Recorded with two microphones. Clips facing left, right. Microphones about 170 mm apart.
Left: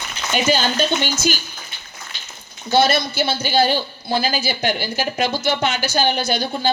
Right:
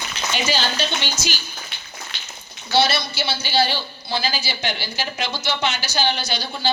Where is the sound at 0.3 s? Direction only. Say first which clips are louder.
Left 6 dB; 50° left (ahead or behind).